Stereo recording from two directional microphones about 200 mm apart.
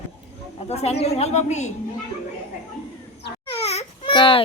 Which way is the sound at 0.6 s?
30° left (ahead or behind).